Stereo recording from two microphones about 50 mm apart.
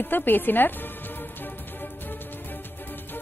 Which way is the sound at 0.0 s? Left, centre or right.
Left.